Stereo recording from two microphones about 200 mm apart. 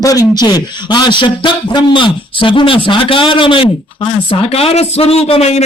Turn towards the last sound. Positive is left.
turn(degrees=30)  # may be behind; listen again after turning